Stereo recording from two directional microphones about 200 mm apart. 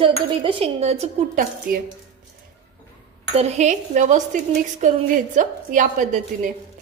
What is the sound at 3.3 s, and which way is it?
A woman's voice, 35° right (ahead or behind).